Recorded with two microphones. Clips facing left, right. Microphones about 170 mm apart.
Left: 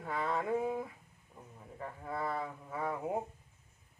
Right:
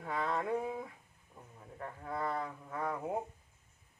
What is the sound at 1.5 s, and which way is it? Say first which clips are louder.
Speech: left 1 dB; 5° left (ahead or behind).